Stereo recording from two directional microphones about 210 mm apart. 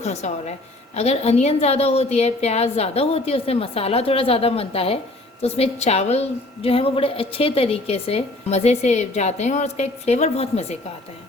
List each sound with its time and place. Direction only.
0.0 s a woman's voice: 30° left (ahead or behind)